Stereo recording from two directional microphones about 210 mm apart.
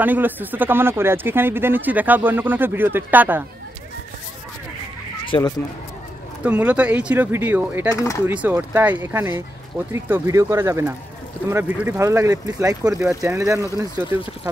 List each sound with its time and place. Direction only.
0.0 s speech: 10° right (ahead or behind)
5.2 s a sound: 25° left (ahead or behind)
6.4 s speech: 5° right (ahead or behind)
7.9 s speech: 15° left (ahead or behind)
8.3 s speech: 10° right (ahead or behind)